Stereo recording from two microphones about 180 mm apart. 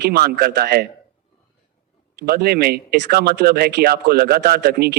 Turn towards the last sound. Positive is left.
turn(degrees=-60)  # may be behind; listen again after turning